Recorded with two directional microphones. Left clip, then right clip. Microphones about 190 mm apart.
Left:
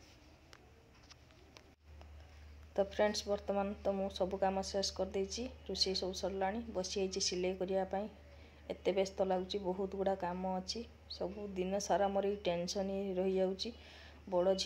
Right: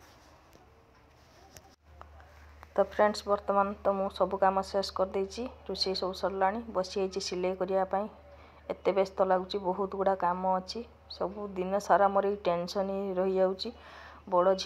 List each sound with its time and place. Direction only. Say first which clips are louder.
2.7 s speech: right 7 dB; 10° right (ahead or behind)
9.6 s speech: right 7 dB; 20° right (ahead or behind)
9.8 s speech: right 11 dB; 5° right (ahead or behind)